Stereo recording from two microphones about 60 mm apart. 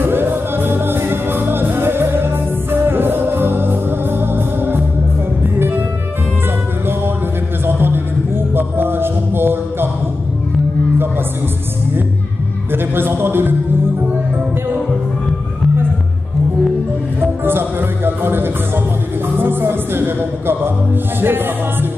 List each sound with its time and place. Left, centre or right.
0.0 s music: right
7.6 s music: right
12.7 s music: right
17.2 s music: right